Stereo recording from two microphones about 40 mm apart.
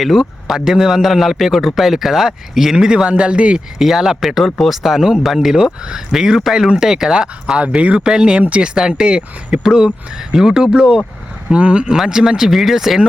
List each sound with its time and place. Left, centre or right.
0.0 s a man's voice: centre
3.1 s speech: right
3.8 s a man's voice: centre
7.8 s speech: right
8.0 s speech: right
8.7 s a man's voice: centre
11.4 s speech: right
12.0 s a man's voice: centre